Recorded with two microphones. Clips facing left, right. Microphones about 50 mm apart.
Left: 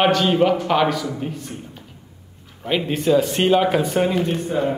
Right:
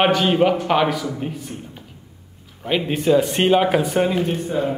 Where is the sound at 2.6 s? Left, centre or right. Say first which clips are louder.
Right 1 dB; centre.